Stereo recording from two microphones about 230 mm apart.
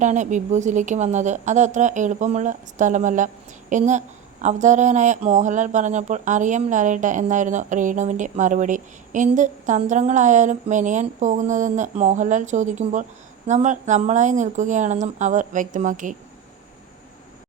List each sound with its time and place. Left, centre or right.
0.0 s a woman's voice: right